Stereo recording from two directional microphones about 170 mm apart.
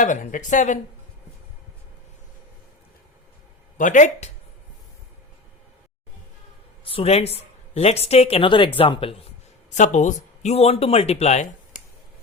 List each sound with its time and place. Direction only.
0.0 s speech: 45° left (ahead or behind)
3.8 s speech: 45° left (ahead or behind)
6.8 s speech: 35° left (ahead or behind)
9.6 s speech: 45° left (ahead or behind)